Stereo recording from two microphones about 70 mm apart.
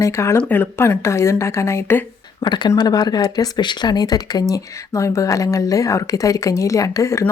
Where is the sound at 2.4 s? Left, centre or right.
Left.